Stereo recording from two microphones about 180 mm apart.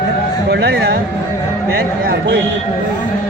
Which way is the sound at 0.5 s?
70° right (ahead or behind).